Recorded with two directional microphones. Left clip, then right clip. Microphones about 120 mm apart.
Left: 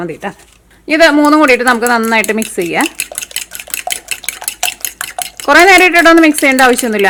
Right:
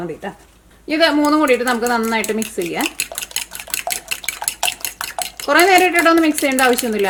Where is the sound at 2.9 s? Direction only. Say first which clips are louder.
Left 3 dB; centre (ahead or behind).